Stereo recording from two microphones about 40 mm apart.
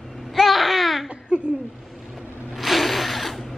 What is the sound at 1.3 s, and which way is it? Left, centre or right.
Speech, right.